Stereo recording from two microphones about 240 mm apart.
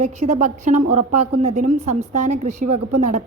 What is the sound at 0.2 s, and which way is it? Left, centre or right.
Speech, right.